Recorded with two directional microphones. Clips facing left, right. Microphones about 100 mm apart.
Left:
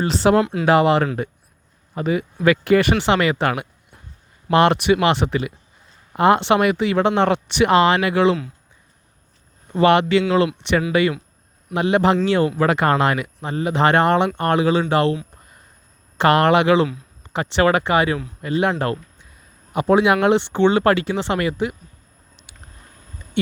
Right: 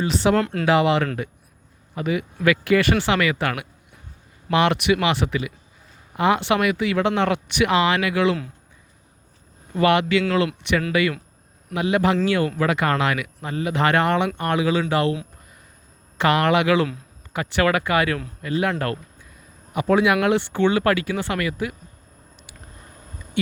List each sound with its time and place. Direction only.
0.1 s speech: 35° left (ahead or behind)
0.3 s speech: 5° left (ahead or behind)
0.6 s speech: 40° left (ahead or behind)
2.8 s speech: 20° left (ahead or behind)
3.2 s speech: 30° left (ahead or behind)
9.7 s speech: 30° left (ahead or behind)
12.5 s speech: 35° left (ahead or behind)
16.1 s speech: 35° left (ahead or behind)